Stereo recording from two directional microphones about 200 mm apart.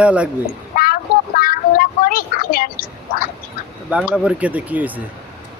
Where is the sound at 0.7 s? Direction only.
45° left (ahead or behind).